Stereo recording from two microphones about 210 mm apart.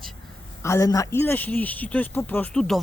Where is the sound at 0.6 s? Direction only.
15° left (ahead or behind).